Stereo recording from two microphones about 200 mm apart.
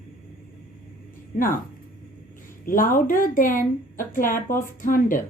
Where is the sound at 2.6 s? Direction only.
45° left (ahead or behind).